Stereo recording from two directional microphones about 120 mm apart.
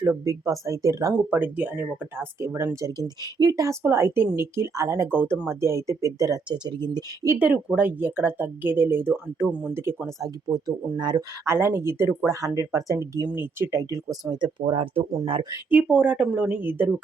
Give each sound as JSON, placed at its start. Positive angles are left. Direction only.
{"t": 0.0, "sound": "speech", "side_deg": -25}
{"t": 1.3, "sound": "speech", "side_deg": -15}
{"t": 5.1, "sound": "speech", "side_deg": -15}
{"t": 7.3, "sound": "speech", "side_deg": -10}
{"t": 11.4, "sound": "speech", "side_deg": -20}
{"t": 15.7, "sound": "speech", "side_deg": -10}